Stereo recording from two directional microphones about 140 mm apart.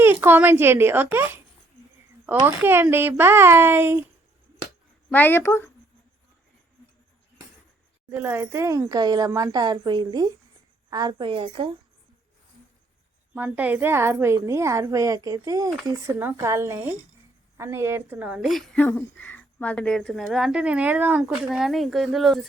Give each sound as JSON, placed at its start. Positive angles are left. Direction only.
{"t": 0.0, "sound": "speech", "side_deg": -15}
{"t": 2.4, "sound": "speech", "side_deg": -15}
{"t": 5.1, "sound": "a woman's voice", "side_deg": 15}
{"t": 8.1, "sound": "a woman's voice", "side_deg": -15}
{"t": 13.3, "sound": "a woman's voice", "side_deg": -10}
{"t": 18.8, "sound": "a woman's voice", "side_deg": 10}